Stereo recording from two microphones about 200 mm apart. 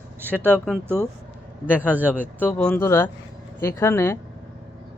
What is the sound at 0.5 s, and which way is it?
Speech, 5° left (ahead or behind).